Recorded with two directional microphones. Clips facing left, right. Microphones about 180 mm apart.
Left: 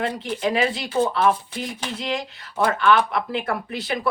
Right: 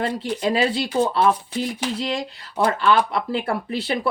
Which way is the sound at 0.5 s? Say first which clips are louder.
Right 2 dB; 30° right (ahead or behind).